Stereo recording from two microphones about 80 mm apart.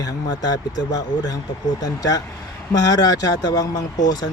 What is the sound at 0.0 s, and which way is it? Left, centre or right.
Speech, left.